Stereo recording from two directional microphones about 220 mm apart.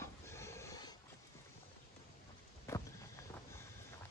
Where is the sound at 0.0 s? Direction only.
10° left (ahead or behind).